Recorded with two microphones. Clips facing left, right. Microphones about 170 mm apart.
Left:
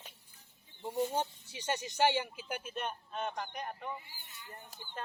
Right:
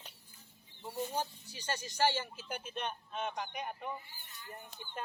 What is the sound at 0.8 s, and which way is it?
Speech, 20° left (ahead or behind).